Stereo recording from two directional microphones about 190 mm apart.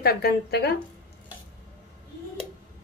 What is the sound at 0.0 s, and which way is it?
Speech, 55° left (ahead or behind).